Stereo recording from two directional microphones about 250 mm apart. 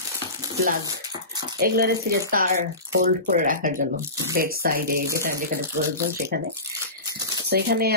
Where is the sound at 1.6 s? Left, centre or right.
Right.